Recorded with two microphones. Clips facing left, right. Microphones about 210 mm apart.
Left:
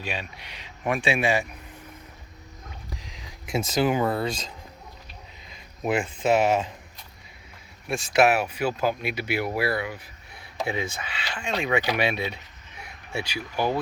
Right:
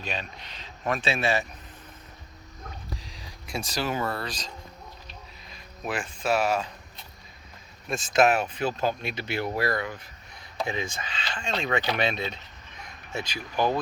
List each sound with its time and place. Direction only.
0.0 s speech: 10° left (ahead or behind)
3.0 s speech: 20° left (ahead or behind)
5.8 s speech: 25° left (ahead or behind)
7.9 s speech: 10° left (ahead or behind)